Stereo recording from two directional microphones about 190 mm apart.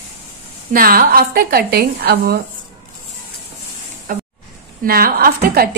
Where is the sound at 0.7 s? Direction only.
50° right (ahead or behind).